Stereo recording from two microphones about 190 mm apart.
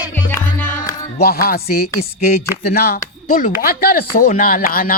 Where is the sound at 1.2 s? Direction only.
50° left (ahead or behind).